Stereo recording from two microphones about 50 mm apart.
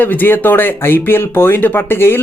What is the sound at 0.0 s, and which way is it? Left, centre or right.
Speech, left.